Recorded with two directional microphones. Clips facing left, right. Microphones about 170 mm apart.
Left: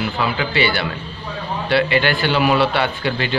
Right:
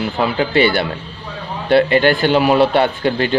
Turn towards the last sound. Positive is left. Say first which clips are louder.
# right 5 dB
turn(degrees=-45)  # may be behind; listen again after turning